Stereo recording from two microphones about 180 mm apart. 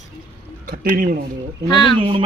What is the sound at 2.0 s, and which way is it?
Speech, 30° right (ahead or behind).